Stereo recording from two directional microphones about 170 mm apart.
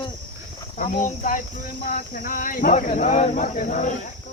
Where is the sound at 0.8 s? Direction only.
50° left (ahead or behind).